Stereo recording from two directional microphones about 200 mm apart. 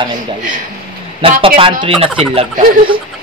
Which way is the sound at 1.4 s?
25° right (ahead or behind).